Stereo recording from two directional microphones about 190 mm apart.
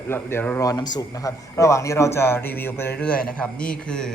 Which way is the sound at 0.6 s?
20° left (ahead or behind).